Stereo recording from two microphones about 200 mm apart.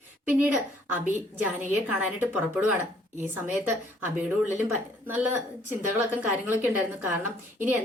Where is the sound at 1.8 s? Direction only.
10° right (ahead or behind).